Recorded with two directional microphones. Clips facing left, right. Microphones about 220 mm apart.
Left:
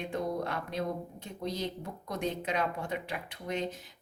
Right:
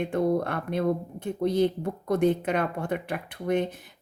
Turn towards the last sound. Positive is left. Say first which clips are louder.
# right 8 dB
turn(degrees=-55)  # may be behind; listen again after turning